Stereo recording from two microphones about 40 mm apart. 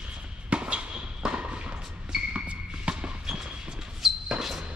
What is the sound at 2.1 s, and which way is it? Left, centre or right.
Music, right.